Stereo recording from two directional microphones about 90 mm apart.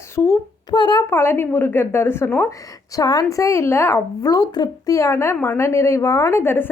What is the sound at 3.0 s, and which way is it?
A woman's voice, 45° left (ahead or behind).